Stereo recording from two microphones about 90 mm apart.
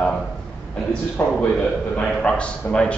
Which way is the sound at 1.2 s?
20° left (ahead or behind).